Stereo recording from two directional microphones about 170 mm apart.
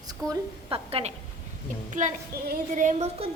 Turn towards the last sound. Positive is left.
turn(degrees=-45)  # may be behind; listen again after turning